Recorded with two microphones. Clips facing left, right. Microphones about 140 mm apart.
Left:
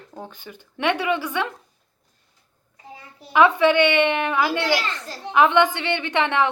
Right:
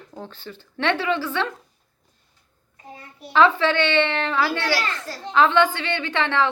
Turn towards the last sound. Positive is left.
turn(degrees=20)  # may be behind; listen again after turning